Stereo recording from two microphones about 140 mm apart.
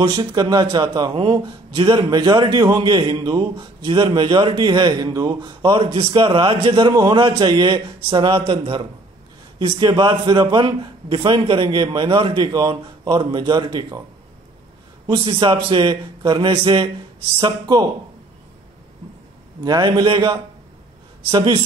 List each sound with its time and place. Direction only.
0.0 s a man's voice: 30° right (ahead or behind)
15.0 s a man's voice: 40° right (ahead or behind)
19.6 s a man's voice: 25° right (ahead or behind)